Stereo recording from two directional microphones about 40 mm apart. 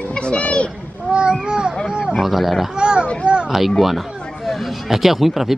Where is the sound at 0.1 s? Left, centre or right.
Left.